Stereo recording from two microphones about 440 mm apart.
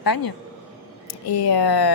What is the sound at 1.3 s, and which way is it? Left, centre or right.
Speech, left.